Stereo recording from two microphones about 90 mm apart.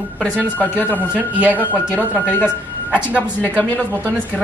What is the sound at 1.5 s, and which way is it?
Speech, 20° left (ahead or behind).